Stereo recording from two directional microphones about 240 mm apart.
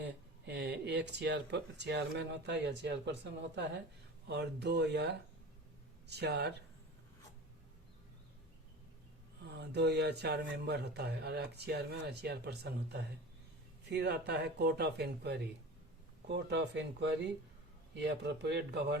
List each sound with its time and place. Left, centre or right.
0.0 s speech: right
9.4 s speech: right